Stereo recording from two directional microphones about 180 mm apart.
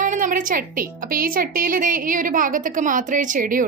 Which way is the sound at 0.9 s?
55° right (ahead or behind).